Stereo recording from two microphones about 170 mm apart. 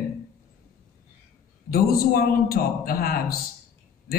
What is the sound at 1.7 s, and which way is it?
A man's voice, 60° left (ahead or behind).